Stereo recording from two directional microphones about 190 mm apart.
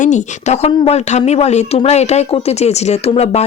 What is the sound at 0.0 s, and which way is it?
Speech, 40° left (ahead or behind).